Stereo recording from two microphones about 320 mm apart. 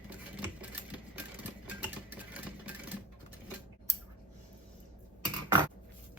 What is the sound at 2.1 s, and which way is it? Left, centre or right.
Engine, centre.